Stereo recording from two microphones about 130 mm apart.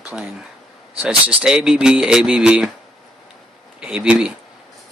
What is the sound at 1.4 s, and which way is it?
Speech, 5° right (ahead or behind).